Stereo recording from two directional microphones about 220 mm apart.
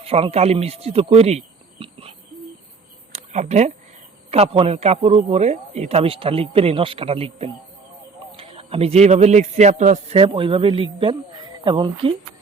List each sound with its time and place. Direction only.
0.0 s speech: 25° right (ahead or behind)
3.1 s a sound: 30° right (ahead or behind)
4.3 s a man's voice: 25° right (ahead or behind)